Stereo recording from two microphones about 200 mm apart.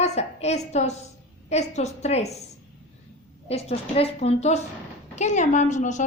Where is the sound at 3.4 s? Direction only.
30° left (ahead or behind).